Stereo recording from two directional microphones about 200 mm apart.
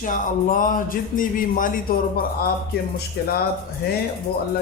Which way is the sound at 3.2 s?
50° left (ahead or behind).